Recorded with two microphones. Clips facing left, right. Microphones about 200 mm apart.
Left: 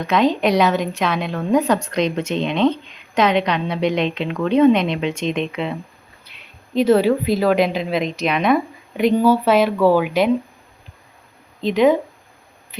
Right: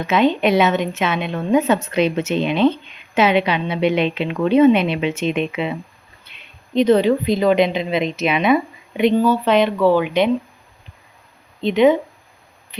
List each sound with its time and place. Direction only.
0.0 s a woman's voice: 5° right (ahead or behind)
9.1 s speech: 10° left (ahead or behind)
11.6 s a woman's voice: centre (ahead or behind)